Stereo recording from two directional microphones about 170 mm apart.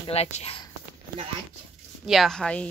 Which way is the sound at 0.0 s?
35° left (ahead or behind).